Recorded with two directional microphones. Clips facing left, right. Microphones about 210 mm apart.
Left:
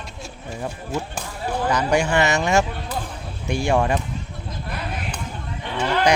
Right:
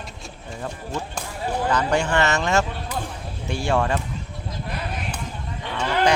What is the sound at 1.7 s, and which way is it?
Speech, 10° left (ahead or behind).